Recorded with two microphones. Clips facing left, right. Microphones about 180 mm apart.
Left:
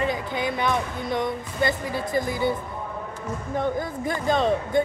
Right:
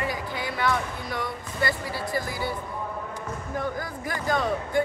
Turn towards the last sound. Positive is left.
turn(degrees=25)  # may be behind; listen again after turning